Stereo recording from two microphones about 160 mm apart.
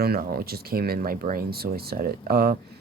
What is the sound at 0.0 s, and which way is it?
Speech, 70° right (ahead or behind).